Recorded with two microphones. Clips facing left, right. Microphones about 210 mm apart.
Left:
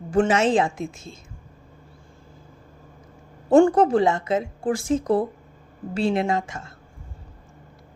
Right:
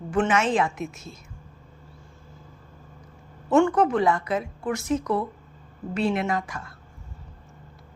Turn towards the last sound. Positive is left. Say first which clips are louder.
# left 3 dB
turn(degrees=25)  # may be behind; listen again after turning